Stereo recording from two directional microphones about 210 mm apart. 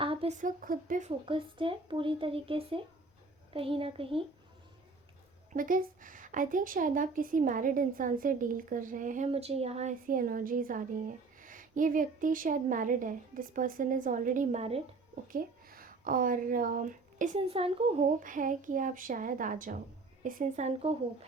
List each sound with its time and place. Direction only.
0.0 s speech: 25° right (ahead or behind)
1.2 s speech: 25° right (ahead or behind)
5.5 s a woman's voice: 40° right (ahead or behind)
15.3 s speech: 45° right (ahead or behind); by 18.0 s 25° right (ahead or behind)
18.2 s a woman's voice: 40° right (ahead or behind)